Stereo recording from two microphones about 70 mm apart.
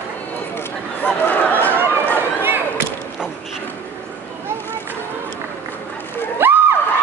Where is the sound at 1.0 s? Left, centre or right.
Left.